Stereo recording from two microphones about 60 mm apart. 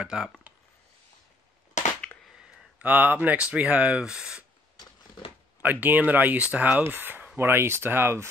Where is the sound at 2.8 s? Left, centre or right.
Right; by 4.4 s centre.